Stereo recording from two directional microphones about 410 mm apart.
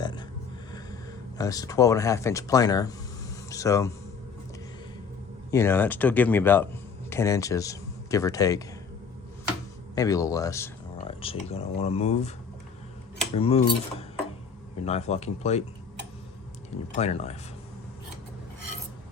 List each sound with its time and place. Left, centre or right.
0.0 s a sound: centre
1.4 s speech: centre
5.5 s speech: centre
9.9 s speech: centre
13.3 s speech: centre
16.9 s speech: centre